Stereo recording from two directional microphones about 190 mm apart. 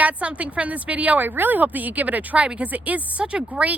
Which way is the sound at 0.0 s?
5° right (ahead or behind).